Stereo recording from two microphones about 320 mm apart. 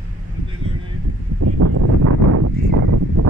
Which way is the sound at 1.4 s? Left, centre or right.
Right.